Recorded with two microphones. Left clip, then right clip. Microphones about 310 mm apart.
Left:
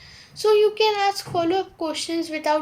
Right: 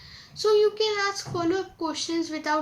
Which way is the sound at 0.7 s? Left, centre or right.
Centre.